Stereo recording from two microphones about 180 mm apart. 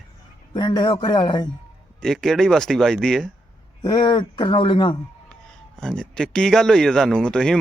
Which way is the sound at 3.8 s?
25° left (ahead or behind).